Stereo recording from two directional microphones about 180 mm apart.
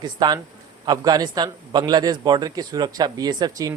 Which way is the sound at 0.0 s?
25° right (ahead or behind).